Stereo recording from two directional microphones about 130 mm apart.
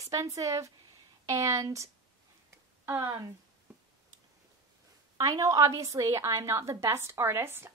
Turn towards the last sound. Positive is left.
turn(degrees=-20)  # may be behind; listen again after turning